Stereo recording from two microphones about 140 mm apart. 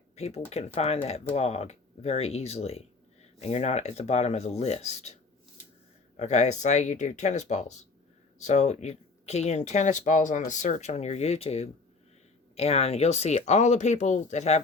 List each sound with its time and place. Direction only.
0.2 s speech: 50° left (ahead or behind)
6.1 s speech: 55° left (ahead or behind)